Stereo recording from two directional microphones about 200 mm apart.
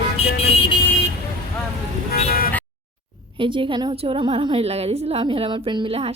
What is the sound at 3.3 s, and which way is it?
A woman's voice, 25° right (ahead or behind).